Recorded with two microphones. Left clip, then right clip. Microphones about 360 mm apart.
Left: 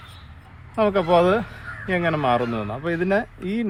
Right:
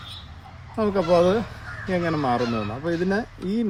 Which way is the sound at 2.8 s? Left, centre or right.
Centre.